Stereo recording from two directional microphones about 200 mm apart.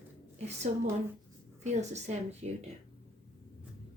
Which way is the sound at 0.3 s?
35° right (ahead or behind).